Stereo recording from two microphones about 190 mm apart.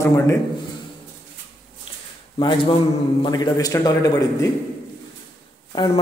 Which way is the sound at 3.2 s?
20° left (ahead or behind).